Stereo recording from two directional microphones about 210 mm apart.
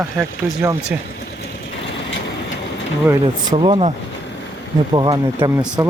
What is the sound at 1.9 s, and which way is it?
Vehicle, 60° left (ahead or behind).